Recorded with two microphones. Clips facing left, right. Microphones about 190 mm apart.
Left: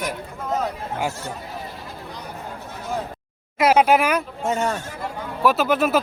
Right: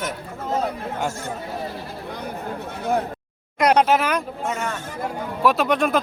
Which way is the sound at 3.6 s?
5° left (ahead or behind).